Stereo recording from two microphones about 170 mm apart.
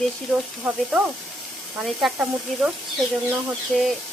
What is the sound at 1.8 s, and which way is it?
A woman's voice, centre (ahead or behind).